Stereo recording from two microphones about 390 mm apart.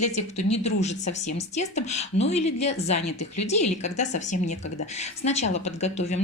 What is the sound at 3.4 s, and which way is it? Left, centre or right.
Speech, centre.